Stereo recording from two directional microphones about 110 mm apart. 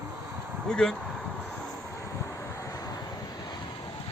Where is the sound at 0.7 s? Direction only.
5° left (ahead or behind).